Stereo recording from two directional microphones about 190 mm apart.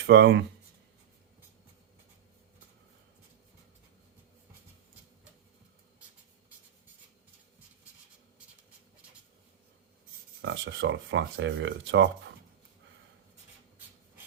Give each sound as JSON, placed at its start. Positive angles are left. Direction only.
{"t": 0.0, "sound": "speech", "side_deg": -60}
{"t": 10.4, "sound": "speech", "side_deg": -70}